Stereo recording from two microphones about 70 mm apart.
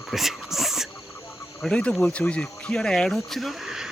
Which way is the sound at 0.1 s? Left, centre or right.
Centre.